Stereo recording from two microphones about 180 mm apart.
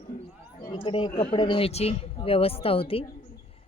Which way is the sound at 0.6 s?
25° left (ahead or behind).